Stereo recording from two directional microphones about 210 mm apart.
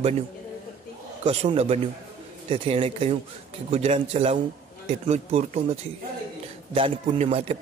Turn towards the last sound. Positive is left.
turn(degrees=-30)  # may be behind; listen again after turning